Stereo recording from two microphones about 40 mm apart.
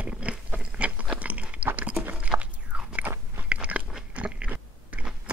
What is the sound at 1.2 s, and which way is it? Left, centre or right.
Crunch, right.